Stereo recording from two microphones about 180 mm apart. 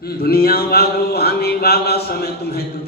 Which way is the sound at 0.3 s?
60° left (ahead or behind).